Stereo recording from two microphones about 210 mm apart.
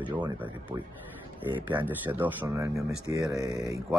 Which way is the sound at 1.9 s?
10° right (ahead or behind).